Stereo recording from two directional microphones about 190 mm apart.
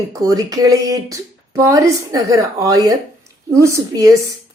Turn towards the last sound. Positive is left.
turn(degrees=-20)  # may be behind; listen again after turning